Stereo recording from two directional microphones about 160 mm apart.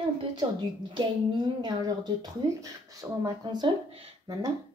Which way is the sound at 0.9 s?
30° right (ahead or behind).